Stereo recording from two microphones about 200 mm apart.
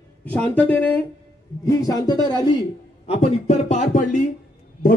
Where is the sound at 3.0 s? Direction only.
30° left (ahead or behind).